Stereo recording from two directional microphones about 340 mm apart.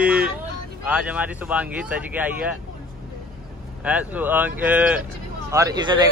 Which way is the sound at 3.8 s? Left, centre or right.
Centre.